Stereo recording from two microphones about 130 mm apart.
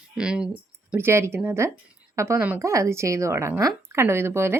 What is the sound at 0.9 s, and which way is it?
Speech, 20° right (ahead or behind).